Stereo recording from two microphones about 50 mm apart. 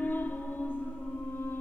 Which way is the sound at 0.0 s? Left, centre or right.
Left.